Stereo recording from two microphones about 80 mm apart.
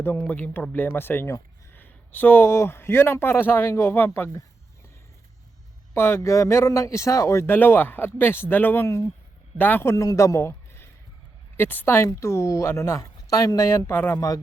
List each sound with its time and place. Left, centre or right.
0.0 s speech: left
5.9 s speech: left
9.9 s a man's voice: left